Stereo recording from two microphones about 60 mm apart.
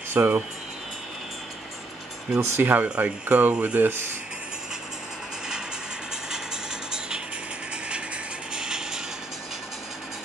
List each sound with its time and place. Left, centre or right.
0.2 s speech: right
2.3 s speech: right
2.6 s speech: right
8.5 s music: centre